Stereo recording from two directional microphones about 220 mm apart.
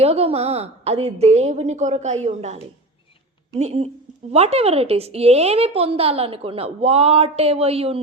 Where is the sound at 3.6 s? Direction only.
30° right (ahead or behind).